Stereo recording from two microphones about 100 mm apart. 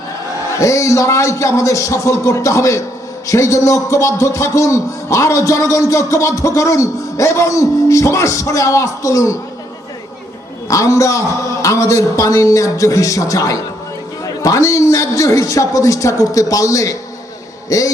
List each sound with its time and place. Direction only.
0.6 s a man's voice: 30° left (ahead or behind)
10.7 s a man's voice: 30° left (ahead or behind)